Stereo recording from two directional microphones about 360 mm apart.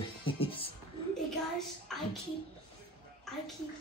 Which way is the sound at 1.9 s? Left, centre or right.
Centre.